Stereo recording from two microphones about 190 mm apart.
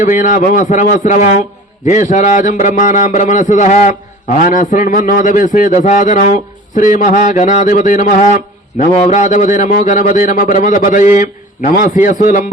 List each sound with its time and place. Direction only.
0.0 s a man's voice: 45° left (ahead or behind)